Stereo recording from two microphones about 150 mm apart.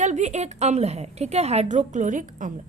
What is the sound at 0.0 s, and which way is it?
A woman's voice, 50° right (ahead or behind).